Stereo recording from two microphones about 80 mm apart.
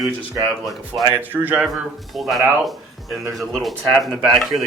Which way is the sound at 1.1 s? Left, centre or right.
Right.